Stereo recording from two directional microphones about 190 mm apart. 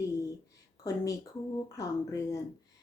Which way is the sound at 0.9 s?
20° left (ahead or behind).